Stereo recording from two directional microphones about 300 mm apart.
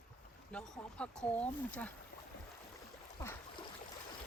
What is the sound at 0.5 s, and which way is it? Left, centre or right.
Speech, centre.